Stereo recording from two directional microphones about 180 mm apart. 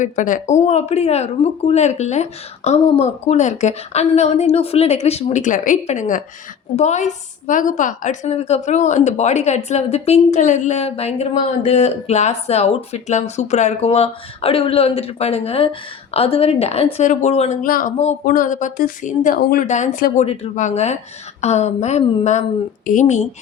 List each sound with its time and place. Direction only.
0.0 s a woman's voice: 45° left (ahead or behind)
19.6 s a woman's voice: 40° left (ahead or behind)
20.2 s a woman's voice: 35° left (ahead or behind)